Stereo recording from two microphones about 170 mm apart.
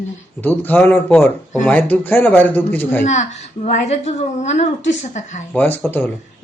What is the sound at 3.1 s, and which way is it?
A woman's voice, 40° left (ahead or behind).